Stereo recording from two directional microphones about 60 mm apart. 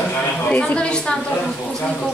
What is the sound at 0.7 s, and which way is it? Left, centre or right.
Speech, centre.